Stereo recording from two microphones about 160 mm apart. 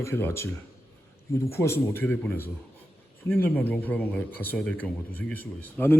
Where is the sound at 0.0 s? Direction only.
15° left (ahead or behind).